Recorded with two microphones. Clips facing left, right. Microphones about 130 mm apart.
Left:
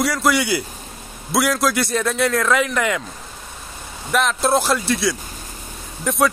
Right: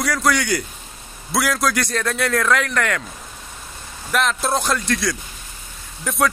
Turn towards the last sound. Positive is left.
turn(degrees=0)  # may be behind; listen again after turning